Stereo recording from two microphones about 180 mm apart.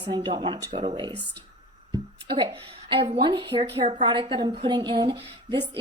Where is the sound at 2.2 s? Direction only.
25° right (ahead or behind).